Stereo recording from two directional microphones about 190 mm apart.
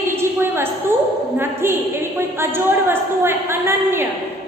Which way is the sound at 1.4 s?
15° right (ahead or behind).